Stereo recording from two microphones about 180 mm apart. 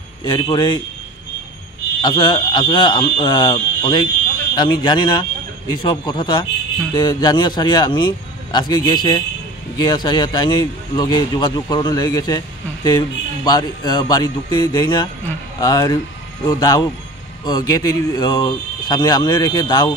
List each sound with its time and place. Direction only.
0.2 s speech: 25° left (ahead or behind)
2.0 s speech: 25° left (ahead or behind)